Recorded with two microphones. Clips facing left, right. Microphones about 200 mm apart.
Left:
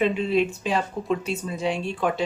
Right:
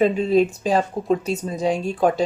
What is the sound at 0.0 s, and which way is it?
Speech, 40° right (ahead or behind).